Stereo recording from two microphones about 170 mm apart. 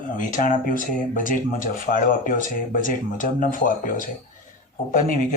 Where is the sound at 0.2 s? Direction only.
50° left (ahead or behind).